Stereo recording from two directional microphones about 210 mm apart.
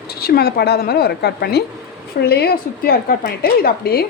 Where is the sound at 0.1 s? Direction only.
45° left (ahead or behind).